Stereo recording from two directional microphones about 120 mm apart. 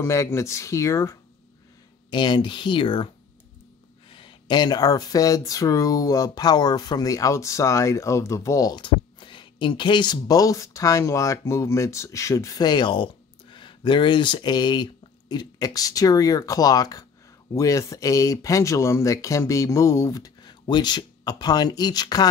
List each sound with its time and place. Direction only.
0.0 s speech: 25° left (ahead or behind)
2.0 s speech: 40° left (ahead or behind)
4.1 s speech: 40° left (ahead or behind)